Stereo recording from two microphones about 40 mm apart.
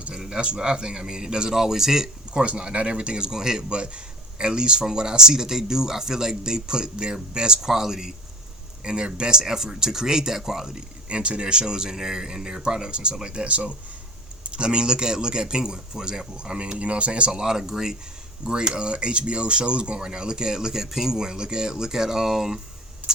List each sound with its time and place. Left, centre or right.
0.1 s speech: right
2.3 s speech: right; by 8.1 s centre
8.8 s a man's voice: right
11.1 s speech: right
17.4 s a man's voice: centre